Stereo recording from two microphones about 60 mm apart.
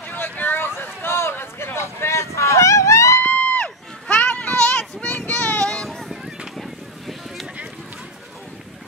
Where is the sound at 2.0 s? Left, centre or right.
Left.